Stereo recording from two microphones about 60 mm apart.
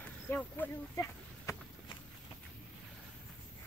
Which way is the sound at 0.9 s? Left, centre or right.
Left.